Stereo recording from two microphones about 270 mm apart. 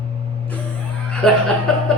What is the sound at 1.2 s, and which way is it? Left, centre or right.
Speech, centre.